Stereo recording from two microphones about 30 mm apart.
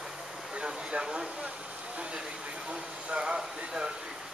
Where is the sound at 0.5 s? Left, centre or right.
Right.